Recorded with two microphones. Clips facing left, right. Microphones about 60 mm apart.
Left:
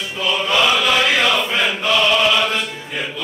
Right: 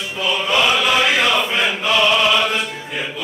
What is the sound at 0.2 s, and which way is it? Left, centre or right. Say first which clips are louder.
Chant: even; centre.